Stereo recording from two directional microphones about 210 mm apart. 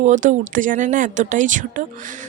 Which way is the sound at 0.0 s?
35° right (ahead or behind).